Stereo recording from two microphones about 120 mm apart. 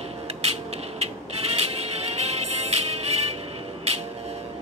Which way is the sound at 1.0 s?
55° right (ahead or behind).